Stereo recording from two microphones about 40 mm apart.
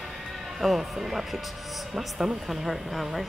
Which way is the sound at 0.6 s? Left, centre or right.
Centre.